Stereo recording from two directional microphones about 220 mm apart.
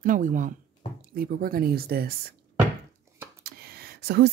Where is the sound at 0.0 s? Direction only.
35° right (ahead or behind).